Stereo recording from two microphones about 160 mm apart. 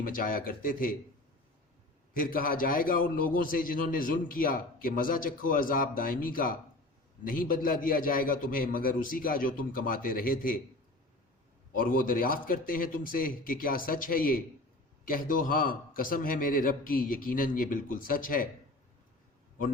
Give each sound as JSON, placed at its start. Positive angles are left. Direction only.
{"t": 0.0, "sound": "a man's voice", "side_deg": 60}
{"t": 2.1, "sound": "a man's voice", "side_deg": 60}
{"t": 11.7, "sound": "a man's voice", "side_deg": 60}